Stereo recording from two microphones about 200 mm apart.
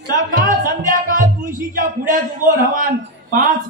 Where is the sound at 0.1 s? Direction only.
40° right (ahead or behind).